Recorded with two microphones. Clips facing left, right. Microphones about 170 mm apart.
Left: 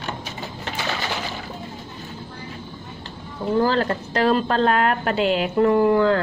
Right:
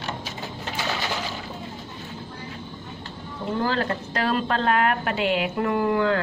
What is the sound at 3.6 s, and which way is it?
A woman's voice, 35° left (ahead or behind).